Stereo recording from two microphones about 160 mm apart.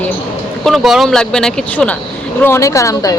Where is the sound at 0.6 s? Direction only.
Centre (ahead or behind).